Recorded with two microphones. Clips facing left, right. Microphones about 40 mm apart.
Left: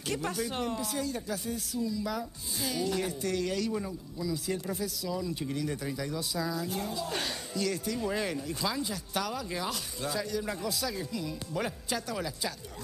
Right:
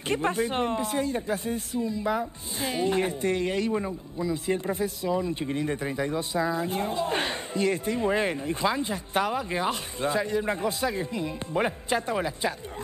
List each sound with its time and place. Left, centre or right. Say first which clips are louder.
0.1 s speech: right 7 dB; right